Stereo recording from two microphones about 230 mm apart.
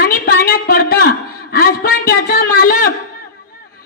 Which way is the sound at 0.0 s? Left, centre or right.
Left.